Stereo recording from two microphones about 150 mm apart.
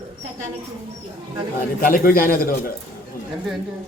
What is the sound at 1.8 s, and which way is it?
Speech, 75° left (ahead or behind).